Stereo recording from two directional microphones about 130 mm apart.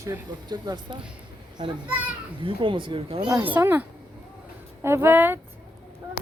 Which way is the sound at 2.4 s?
40° right (ahead or behind).